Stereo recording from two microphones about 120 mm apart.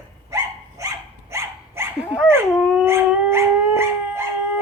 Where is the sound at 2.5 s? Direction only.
5° right (ahead or behind).